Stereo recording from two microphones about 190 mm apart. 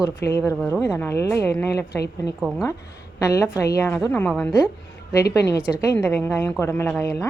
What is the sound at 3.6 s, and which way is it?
Speech, 15° left (ahead or behind).